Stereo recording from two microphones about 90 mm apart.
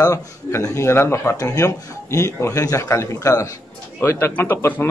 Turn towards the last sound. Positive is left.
turn(degrees=25)  # may be behind; listen again after turning